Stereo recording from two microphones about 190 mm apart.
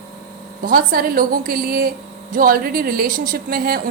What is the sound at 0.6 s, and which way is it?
Speech, 50° right (ahead or behind).